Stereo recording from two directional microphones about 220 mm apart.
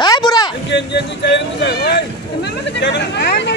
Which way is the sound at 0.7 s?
55° left (ahead or behind).